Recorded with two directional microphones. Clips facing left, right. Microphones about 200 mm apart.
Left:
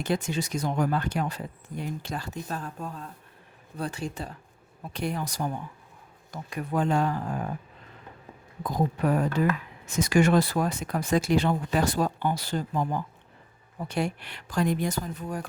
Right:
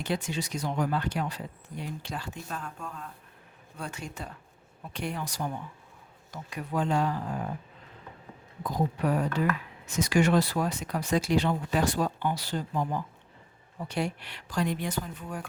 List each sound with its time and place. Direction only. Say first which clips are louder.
0.0 s speech: left 3 dB; 45° left (ahead or behind)
8.7 s speech: left 2 dB; 50° left (ahead or behind)
13.8 s speech: left 2 dB; 50° left (ahead or behind)